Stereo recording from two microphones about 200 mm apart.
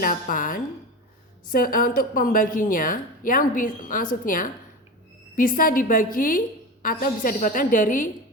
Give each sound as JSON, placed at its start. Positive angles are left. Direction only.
{"t": 0.0, "sound": "a woman's voice", "side_deg": 45}